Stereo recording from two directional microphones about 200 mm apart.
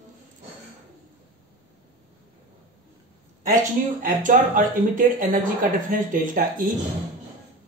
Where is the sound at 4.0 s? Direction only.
40° right (ahead or behind).